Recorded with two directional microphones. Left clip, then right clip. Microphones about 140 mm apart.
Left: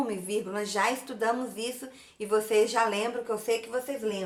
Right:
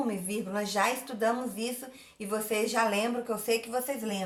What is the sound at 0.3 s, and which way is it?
A woman's voice, 20° left (ahead or behind).